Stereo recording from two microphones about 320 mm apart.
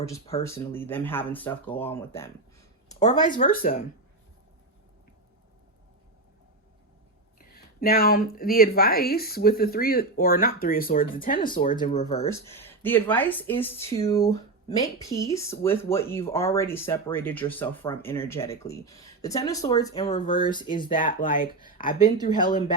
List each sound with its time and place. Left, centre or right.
0.0 s speech: centre
3.3 s speech: left
7.3 s speech: left
12.3 s speech: centre; by 21.5 s left
22.0 s speech: centre